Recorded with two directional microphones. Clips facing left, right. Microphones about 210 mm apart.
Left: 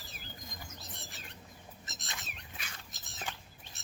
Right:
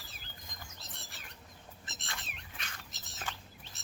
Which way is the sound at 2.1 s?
5° left (ahead or behind).